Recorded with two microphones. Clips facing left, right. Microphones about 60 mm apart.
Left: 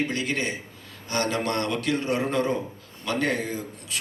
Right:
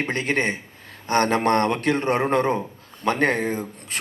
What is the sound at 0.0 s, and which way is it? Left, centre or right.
A man's voice, right.